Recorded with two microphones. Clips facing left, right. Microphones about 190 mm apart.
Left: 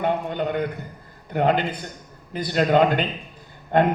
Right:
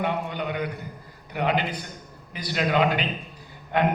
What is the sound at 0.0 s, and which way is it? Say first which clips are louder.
A man's voice: left 4 dB; 50° left (ahead or behind).